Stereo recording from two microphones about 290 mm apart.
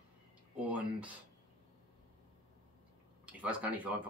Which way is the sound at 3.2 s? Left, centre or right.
Centre.